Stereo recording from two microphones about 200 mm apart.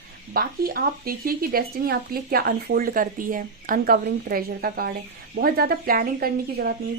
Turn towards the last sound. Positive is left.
turn(degrees=-50)  # may be behind; listen again after turning